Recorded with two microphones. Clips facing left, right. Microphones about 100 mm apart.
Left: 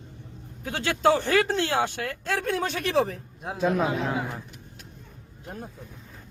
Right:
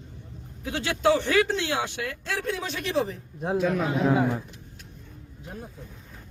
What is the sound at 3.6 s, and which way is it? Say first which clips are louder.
Speech: left 4 dB; 35° left (ahead or behind).